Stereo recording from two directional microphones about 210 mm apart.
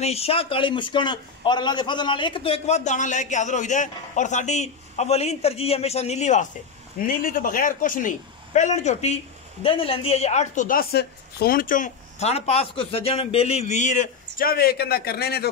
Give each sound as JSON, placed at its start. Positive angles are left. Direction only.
{"t": 0.0, "sound": "a man's voice", "side_deg": 30}